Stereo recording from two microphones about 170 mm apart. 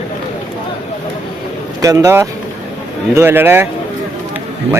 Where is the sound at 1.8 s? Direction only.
20° right (ahead or behind).